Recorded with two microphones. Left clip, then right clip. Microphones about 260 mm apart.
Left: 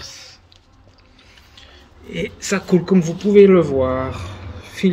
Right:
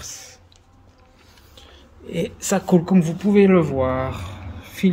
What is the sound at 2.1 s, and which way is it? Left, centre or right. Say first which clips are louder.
A woman's voice: even; right.